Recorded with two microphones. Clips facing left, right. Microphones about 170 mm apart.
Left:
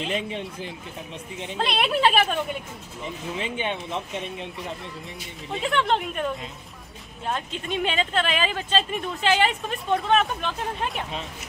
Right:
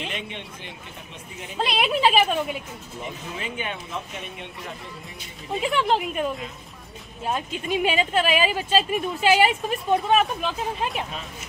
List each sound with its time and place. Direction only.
1.6 s speech: centre (ahead or behind)
3.3 s speech: 25° left (ahead or behind)
5.6 s speech: 5° right (ahead or behind)